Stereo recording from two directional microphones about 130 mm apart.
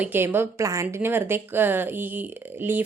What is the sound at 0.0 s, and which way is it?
A woman's voice, 15° right (ahead or behind).